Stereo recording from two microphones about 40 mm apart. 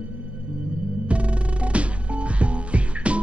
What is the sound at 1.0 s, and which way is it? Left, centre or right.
Music, right.